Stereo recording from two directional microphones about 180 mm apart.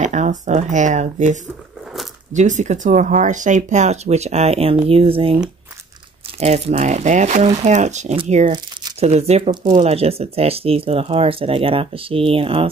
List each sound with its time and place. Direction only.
0.0 s speech: 40° right (ahead or behind)
6.4 s speech: 40° right (ahead or behind)